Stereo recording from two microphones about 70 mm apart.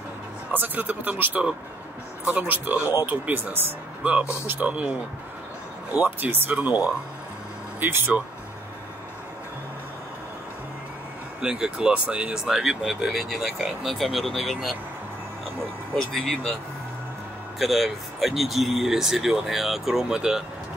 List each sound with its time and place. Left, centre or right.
0.5 s speech: right
7.8 s speech: right
11.4 s speech: centre
16.1 s speech: centre
17.6 s speech: centre